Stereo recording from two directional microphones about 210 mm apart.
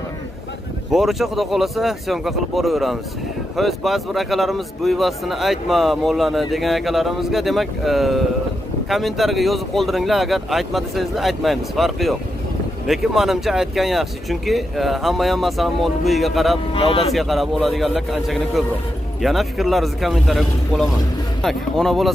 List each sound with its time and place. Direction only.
0.9 s speech: centre (ahead or behind)
16.7 s speech: 25° left (ahead or behind)
17.1 s speech: centre (ahead or behind)